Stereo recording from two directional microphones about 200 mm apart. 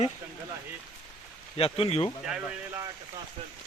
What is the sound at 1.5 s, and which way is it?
Speech, 30° left (ahead or behind).